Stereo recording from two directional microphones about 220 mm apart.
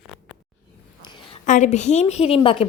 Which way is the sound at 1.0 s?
20° left (ahead or behind).